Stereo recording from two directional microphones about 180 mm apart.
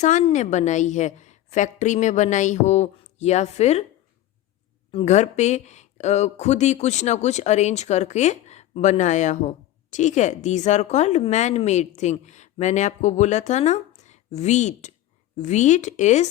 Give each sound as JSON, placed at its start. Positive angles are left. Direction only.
{"t": 0.0, "sound": "speech", "side_deg": 40}
{"t": 4.9, "sound": "speech", "side_deg": 35}